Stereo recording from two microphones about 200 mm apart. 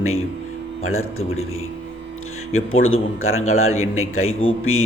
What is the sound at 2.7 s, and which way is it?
A man's voice, 90° left.